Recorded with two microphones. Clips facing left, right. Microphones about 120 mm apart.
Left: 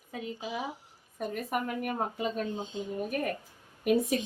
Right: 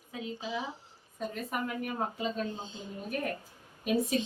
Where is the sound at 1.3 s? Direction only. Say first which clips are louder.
Left 4 dB; 55° left (ahead or behind).